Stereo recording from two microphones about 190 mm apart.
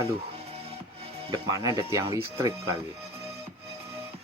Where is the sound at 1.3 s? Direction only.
20° right (ahead or behind).